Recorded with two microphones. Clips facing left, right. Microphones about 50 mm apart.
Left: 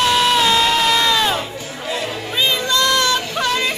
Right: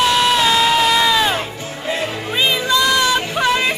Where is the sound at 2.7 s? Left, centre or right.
Centre.